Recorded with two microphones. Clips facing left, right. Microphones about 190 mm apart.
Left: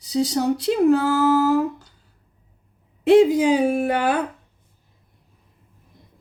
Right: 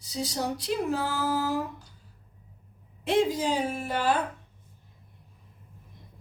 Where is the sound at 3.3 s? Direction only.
70° left (ahead or behind).